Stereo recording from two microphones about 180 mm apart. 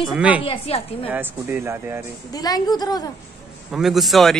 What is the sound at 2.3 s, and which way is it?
Speech, 20° left (ahead or behind).